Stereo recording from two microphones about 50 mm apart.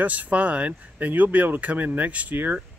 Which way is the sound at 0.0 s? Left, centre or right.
Right.